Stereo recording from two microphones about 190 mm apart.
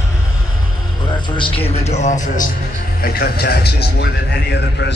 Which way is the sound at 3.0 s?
55° left (ahead or behind).